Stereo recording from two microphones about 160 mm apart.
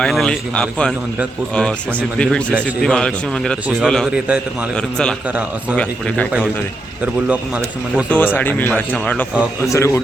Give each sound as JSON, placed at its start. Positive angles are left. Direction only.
{"t": 0.0, "sound": "speech", "side_deg": 0}
{"t": 5.7, "sound": "speech", "side_deg": 5}
{"t": 8.1, "sound": "speech", "side_deg": 10}